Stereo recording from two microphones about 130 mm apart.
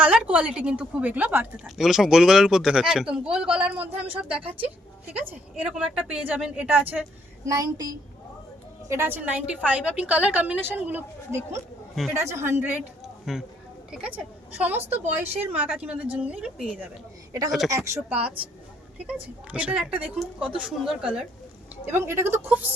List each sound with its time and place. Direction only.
0.0 s a woman's voice: 10° right (ahead or behind)
1.6 s a man's voice: 5° right (ahead or behind)
7.4 s a woman's voice: 25° right (ahead or behind)
13.3 s a man's voice: centre (ahead or behind)
17.7 s a woman's voice: 25° right (ahead or behind)
19.0 s a woman's voice: 10° right (ahead or behind)
21.8 s a woman's voice: 20° right (ahead or behind)